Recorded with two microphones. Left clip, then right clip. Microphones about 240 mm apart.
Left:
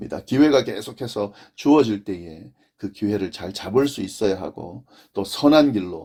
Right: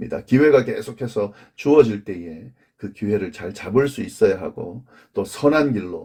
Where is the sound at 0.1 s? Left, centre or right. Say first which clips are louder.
Right 3 dB; left.